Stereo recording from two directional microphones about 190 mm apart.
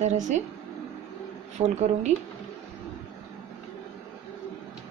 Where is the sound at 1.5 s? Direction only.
40° right (ahead or behind).